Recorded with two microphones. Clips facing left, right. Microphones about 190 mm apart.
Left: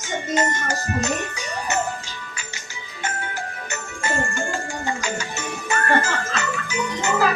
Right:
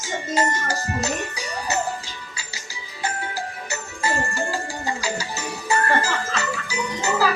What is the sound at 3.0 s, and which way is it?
Music, 35° right (ahead or behind).